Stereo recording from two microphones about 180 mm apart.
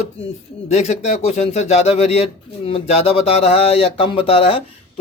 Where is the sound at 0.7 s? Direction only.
40° left (ahead or behind).